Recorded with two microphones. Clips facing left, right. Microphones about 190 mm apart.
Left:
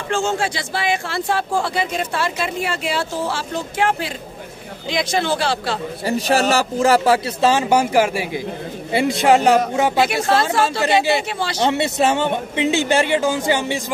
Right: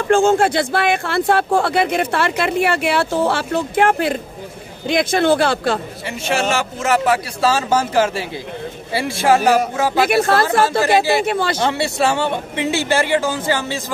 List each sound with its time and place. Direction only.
0.1 s speech: 55° right (ahead or behind)
6.0 s speech: 35° left (ahead or behind)
7.3 s a woman's voice: 20° left (ahead or behind)
10.0 s speech: 55° right (ahead or behind)
11.6 s a woman's voice: 20° left (ahead or behind)